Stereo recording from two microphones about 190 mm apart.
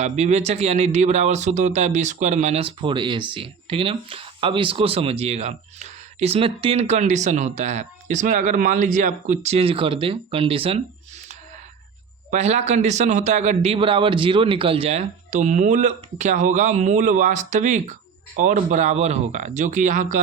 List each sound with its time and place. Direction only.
0.0 s speech: 35° right (ahead or behind)
12.3 s speech: 35° right (ahead or behind)